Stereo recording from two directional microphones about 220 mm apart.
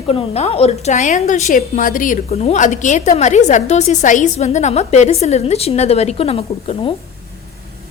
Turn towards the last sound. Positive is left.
turn(degrees=25)  # may be behind; listen again after turning